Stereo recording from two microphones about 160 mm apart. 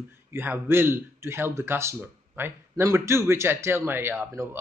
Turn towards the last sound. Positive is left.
turn(degrees=-15)  # may be behind; listen again after turning